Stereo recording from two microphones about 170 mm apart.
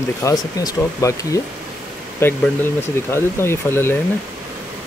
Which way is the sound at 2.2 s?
15° left (ahead or behind).